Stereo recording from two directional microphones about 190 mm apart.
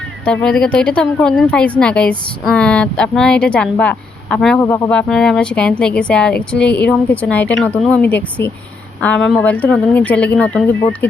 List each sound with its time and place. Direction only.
0.3 s a woman's voice: 5° left (ahead or behind)
4.6 s a woman's voice: 15° left (ahead or behind)
4.9 s a woman's voice: 5° left (ahead or behind)